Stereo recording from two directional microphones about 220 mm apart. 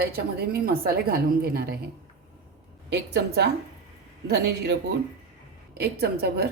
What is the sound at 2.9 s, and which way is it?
A woman's voice, 50° right (ahead or behind).